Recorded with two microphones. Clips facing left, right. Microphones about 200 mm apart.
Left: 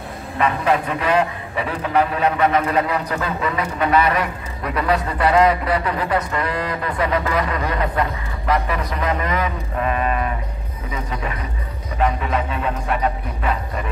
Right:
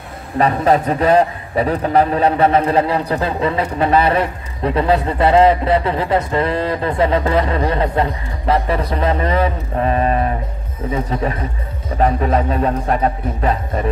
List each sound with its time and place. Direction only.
0.4 s a man's voice: 35° right (ahead or behind)